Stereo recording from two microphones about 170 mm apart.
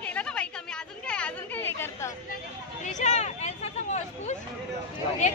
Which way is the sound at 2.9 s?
45° left (ahead or behind).